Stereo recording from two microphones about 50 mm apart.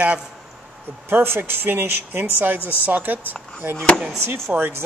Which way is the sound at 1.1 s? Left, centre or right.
Right.